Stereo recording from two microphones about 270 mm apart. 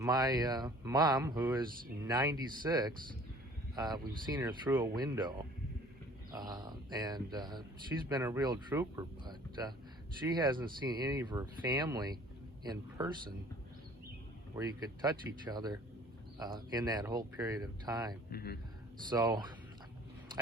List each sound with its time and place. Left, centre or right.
0.0 s speech: centre
14.5 s speech: centre
18.3 s speech: left
19.1 s speech: centre